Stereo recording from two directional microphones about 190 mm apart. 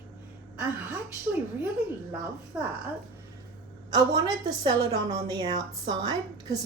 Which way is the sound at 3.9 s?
20° right (ahead or behind).